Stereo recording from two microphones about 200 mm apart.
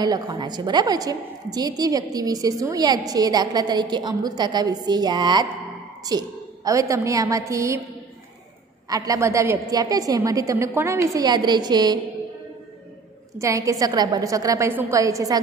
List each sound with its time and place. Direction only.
0.0 s a woman's voice: 20° right (ahead or behind)
8.8 s a woman's voice: 15° right (ahead or behind)
13.4 s a woman's voice: 15° right (ahead or behind)